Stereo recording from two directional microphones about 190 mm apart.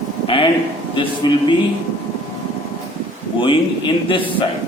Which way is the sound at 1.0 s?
25° left (ahead or behind).